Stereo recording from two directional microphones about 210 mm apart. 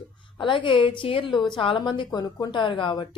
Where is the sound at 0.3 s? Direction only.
25° left (ahead or behind).